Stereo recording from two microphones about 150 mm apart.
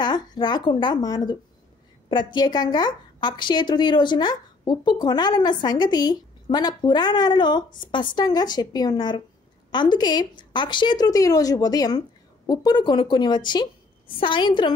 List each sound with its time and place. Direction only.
0.0 s a woman's voice: 30° left (ahead or behind)